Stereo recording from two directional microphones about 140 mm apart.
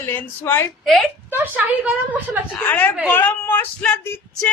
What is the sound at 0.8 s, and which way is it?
Speech, centre (ahead or behind).